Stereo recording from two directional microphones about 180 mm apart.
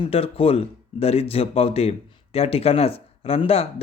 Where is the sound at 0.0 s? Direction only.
30° left (ahead or behind).